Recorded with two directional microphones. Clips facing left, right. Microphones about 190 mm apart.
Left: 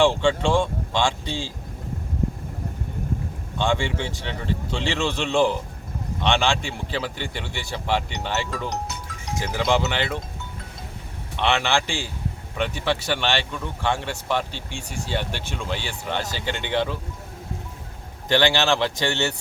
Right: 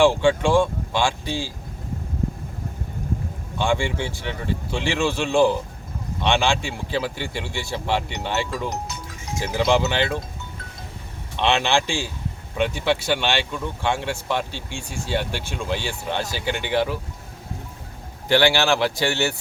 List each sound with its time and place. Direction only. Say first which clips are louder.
0.0 s speech: right 2 dB; 10° right (ahead or behind)
3.6 s speech: right 1 dB; 10° right (ahead or behind)
11.3 s speech: right 2 dB; 15° right (ahead or behind)
18.3 s speech: right 2 dB; 10° right (ahead or behind)